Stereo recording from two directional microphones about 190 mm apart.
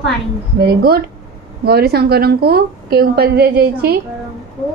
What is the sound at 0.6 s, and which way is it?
A woman's voice, 55° right (ahead or behind).